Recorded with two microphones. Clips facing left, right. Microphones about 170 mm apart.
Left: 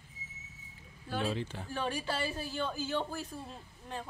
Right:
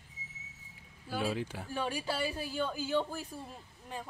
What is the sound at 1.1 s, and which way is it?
Speech, 10° right (ahead or behind).